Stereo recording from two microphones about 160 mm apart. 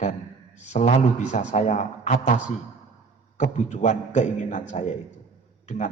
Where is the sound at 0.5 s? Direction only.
45° left (ahead or behind).